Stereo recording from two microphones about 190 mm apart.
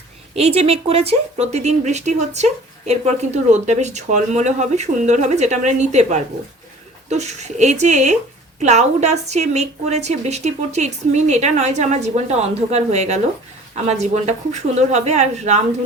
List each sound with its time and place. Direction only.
0.3 s speech: 35° right (ahead or behind)